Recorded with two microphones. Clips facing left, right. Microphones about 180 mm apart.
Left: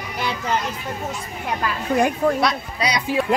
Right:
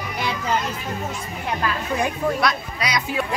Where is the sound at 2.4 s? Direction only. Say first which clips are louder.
Left 2 dB; 30° left (ahead or behind).